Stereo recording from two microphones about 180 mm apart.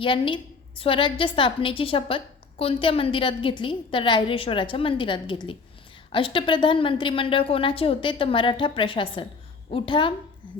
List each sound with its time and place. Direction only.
0.0 s a woman's voice: 30° left (ahead or behind)